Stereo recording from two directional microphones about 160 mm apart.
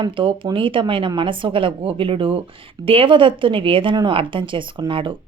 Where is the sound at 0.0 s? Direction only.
30° right (ahead or behind).